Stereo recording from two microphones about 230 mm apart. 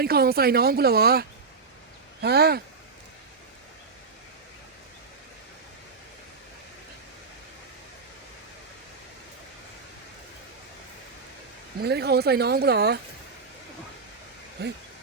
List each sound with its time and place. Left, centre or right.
0.0 s speech: right
11.8 s speech: right
14.6 s speech: right